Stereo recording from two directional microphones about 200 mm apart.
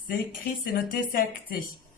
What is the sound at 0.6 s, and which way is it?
Speech, 45° left (ahead or behind).